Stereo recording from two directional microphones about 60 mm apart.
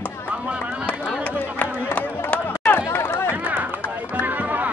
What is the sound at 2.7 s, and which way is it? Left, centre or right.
Chatter, left.